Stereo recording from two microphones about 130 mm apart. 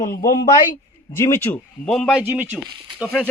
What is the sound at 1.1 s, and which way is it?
Speech, 20° left (ahead or behind).